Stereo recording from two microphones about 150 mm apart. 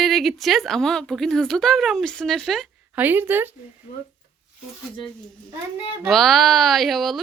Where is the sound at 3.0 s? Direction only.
10° right (ahead or behind).